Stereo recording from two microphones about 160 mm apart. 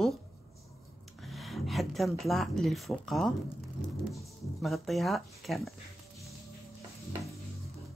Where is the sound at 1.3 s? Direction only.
Centre (ahead or behind).